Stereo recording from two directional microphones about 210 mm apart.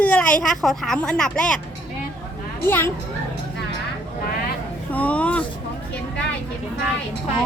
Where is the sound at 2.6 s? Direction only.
10° left (ahead or behind).